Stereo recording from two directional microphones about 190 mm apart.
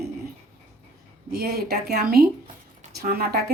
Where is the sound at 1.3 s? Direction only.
55° right (ahead or behind).